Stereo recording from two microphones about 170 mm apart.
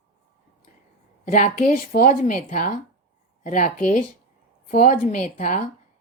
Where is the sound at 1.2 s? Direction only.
50° left (ahead or behind).